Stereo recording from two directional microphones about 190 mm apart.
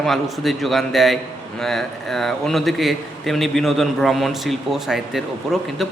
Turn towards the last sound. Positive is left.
turn(degrees=0)  # may be behind; listen again after turning